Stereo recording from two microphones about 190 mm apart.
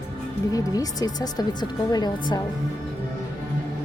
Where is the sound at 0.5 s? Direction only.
20° left (ahead or behind).